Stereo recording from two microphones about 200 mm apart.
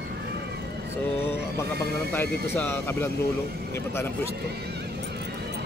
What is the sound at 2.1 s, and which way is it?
Speech, 10° left (ahead or behind).